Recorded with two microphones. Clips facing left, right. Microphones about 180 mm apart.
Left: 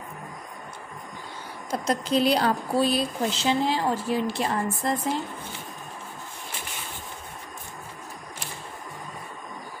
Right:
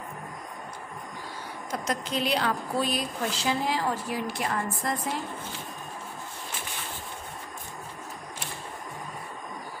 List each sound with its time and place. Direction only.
1.7 s speech: 35° left (ahead or behind)